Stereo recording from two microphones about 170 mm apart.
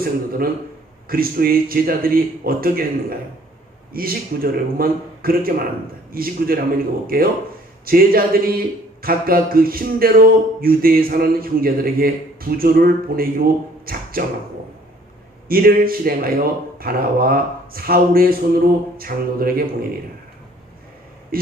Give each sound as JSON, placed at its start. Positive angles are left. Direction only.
{"t": 0.0, "sound": "speech", "side_deg": -60}
{"t": 3.9, "sound": "speech", "side_deg": -60}
{"t": 13.8, "sound": "beatboxing", "side_deg": -60}
{"t": 15.4, "sound": "speech", "side_deg": -60}
{"t": 21.3, "sound": "speech", "side_deg": -60}